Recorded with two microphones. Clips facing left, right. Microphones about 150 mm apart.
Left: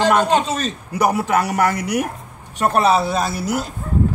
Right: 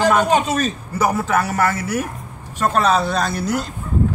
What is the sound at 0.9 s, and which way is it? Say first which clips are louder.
Speech: left 2 dB; 15° left (ahead or behind).